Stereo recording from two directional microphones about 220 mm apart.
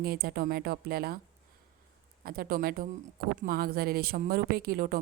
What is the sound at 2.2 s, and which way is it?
A woman's voice, 40° right (ahead or behind).